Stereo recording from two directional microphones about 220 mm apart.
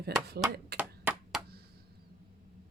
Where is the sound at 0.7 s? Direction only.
5° right (ahead or behind).